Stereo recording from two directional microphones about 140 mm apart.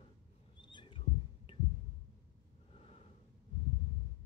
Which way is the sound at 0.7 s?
35° left (ahead or behind).